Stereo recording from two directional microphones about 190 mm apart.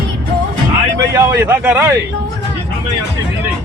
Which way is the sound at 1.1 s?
15° right (ahead or behind).